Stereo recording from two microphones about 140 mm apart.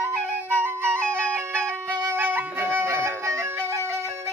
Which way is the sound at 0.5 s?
15° right (ahead or behind).